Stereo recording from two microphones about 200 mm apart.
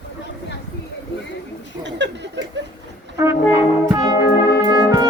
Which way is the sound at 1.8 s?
60° right (ahead or behind).